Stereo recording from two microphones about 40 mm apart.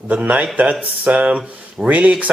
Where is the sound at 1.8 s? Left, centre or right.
Right.